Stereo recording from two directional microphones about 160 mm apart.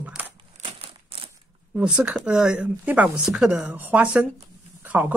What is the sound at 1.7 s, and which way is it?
Speech, 5° right (ahead or behind).